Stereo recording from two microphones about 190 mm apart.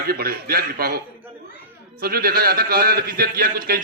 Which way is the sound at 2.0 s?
50° right (ahead or behind).